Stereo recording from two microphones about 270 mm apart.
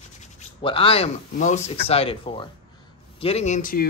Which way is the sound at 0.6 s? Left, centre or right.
Centre.